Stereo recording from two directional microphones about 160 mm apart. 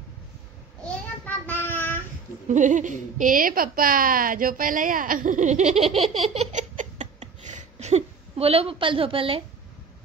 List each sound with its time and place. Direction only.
0.8 s child singing: 10° left (ahead or behind)
2.4 s a woman's voice: 50° right (ahead or behind); by 9.4 s 35° right (ahead or behind)